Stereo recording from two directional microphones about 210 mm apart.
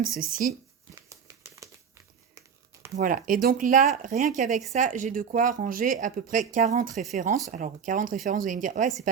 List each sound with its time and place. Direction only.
0.2 s speech: 40° right (ahead or behind)
1.1 s crumpling: 15° right (ahead or behind)
2.9 s speech: 40° right (ahead or behind)